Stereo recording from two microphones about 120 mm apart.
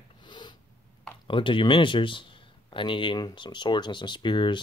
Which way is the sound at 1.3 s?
45° left (ahead or behind).